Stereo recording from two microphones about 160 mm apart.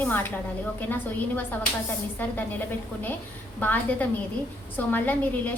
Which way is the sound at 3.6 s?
10° left (ahead or behind).